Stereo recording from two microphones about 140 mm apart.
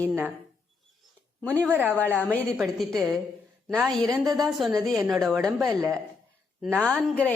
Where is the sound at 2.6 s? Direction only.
Centre (ahead or behind).